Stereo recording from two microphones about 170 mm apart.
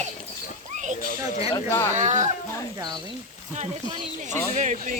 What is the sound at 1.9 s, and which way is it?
Speech, 45° right (ahead or behind).